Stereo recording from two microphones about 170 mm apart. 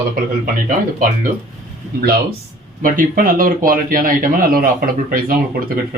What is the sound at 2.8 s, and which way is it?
Speech, 55° right (ahead or behind).